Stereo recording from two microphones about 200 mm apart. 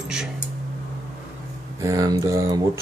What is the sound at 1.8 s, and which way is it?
Speech, 15° right (ahead or behind).